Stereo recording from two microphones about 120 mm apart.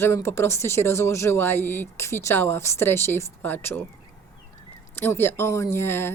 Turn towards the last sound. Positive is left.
turn(degrees=20)  # may be behind; listen again after turning